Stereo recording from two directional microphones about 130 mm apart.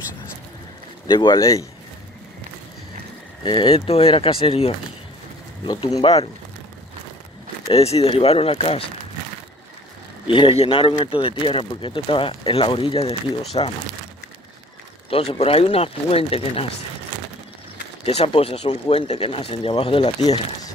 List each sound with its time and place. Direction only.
1.0 s speech: 35° left (ahead or behind)
3.4 s speech: 40° left (ahead or behind)
5.9 s speech: 50° left (ahead or behind)
7.7 s speech: 50° left (ahead or behind)
10.2 s speech: 40° left (ahead or behind)
15.0 s speech: 45° left (ahead or behind)
18.0 s speech: 50° left (ahead or behind)